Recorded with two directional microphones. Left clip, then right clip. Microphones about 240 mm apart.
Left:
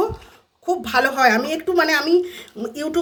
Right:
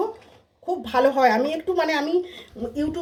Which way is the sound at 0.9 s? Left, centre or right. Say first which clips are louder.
Left 1 dB; left.